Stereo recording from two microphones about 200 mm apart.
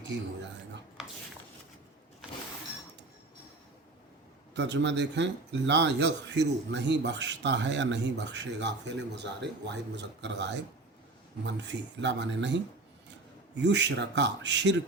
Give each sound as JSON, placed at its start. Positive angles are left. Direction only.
{"t": 4.5, "sound": "speech", "side_deg": -60}